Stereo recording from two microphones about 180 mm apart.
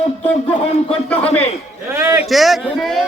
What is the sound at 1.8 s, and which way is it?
Speech, 15° right (ahead or behind).